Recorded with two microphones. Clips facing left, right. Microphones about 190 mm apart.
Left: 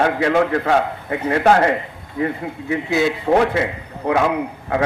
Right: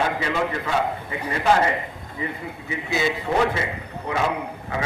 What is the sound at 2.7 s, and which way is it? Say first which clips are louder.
A man's voice: left 6 dB; 65° left (ahead or behind).